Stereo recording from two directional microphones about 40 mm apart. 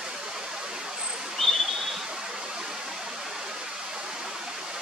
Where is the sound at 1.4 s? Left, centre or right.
Centre.